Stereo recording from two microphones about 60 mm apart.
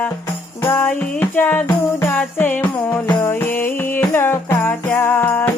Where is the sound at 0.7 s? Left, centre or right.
Left.